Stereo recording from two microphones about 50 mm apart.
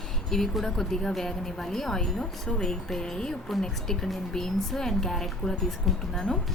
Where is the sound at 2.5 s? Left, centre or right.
Centre.